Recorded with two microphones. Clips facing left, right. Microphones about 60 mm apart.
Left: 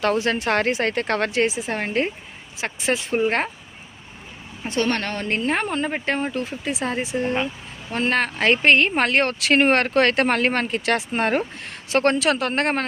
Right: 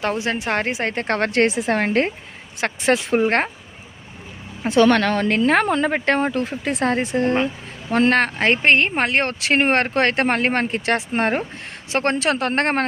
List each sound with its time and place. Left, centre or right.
0.0 s speech: right
0.9 s speech: right
1.3 s a woman's voice: right
2.6 s a woman's voice: right
4.6 s a woman's voice: right
8.4 s speech: right